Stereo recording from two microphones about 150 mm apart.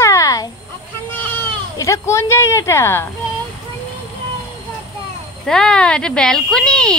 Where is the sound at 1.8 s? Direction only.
20° left (ahead or behind).